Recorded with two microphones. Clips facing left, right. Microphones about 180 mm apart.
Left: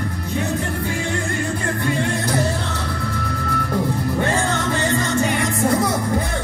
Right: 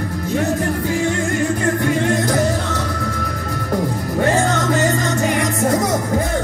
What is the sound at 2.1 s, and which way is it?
Music, 45° right (ahead or behind).